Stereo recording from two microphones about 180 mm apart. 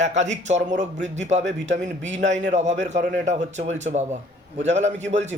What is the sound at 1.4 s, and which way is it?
Speech, 85° right.